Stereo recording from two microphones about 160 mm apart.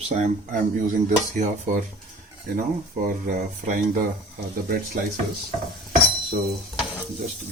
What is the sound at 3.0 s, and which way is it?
Speech, 60° right (ahead or behind).